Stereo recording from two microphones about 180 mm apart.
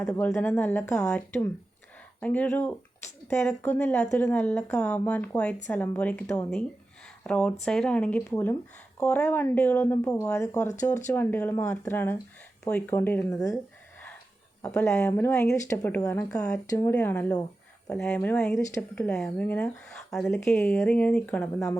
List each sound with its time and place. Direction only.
0.1 s speech: 15° left (ahead or behind)
14.6 s speech: 15° left (ahead or behind)
16.4 s speech: 10° left (ahead or behind)